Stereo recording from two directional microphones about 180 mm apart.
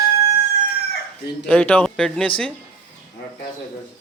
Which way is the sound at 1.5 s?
10° left (ahead or behind).